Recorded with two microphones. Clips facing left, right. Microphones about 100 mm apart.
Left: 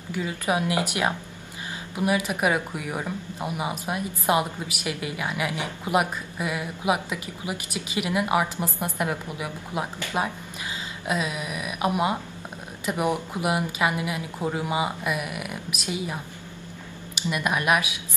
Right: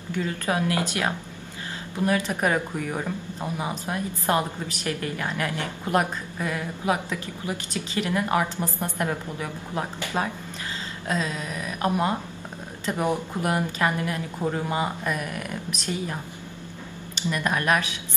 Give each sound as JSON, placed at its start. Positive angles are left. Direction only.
{"t": 0.1, "sound": "a woman's voice", "side_deg": 15}